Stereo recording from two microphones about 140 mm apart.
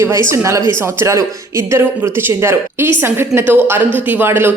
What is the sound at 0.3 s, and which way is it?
A man's voice, 20° right (ahead or behind).